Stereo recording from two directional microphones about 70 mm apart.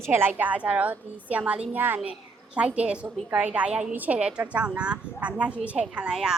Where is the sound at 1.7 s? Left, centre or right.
Right.